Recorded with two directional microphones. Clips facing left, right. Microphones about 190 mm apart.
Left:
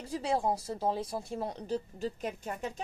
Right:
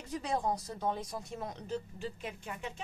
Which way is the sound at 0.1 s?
30° left (ahead or behind).